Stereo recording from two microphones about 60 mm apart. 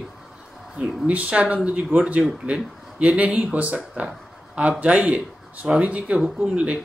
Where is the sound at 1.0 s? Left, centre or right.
Right.